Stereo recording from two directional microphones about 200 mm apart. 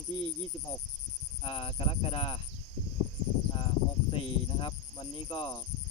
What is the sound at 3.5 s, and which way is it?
Speech, 25° left (ahead or behind).